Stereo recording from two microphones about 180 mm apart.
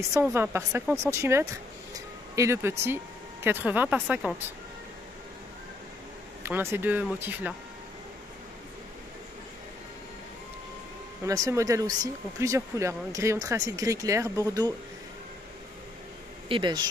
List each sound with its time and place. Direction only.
0.3 s speech: 15° right (ahead or behind)
6.4 s speech: 15° right (ahead or behind)
11.2 s speech: 20° right (ahead or behind)
16.4 s speech: 25° right (ahead or behind)